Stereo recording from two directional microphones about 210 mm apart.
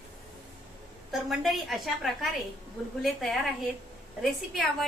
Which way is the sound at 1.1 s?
Centre (ahead or behind).